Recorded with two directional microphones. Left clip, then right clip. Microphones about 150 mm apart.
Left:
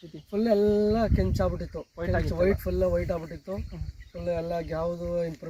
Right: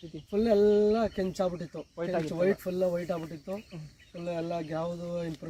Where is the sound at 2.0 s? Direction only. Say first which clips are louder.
Left 1 dB; 15° right (ahead or behind).